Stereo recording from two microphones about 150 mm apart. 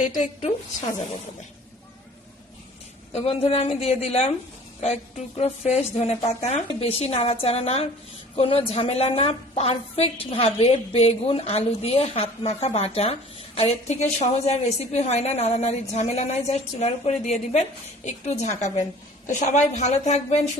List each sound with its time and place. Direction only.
0.0 s a woman's voice: 55° left (ahead or behind)
3.1 s a woman's voice: 45° left (ahead or behind)